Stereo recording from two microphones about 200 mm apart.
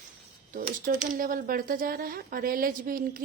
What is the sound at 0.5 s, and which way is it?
A woman's voice, 45° right (ahead or behind).